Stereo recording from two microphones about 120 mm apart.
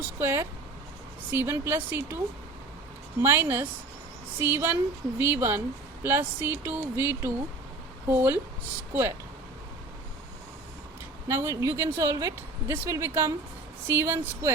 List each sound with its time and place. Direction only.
0.2 s a woman's voice: 20° right (ahead or behind)
11.3 s a woman's voice: 25° right (ahead or behind)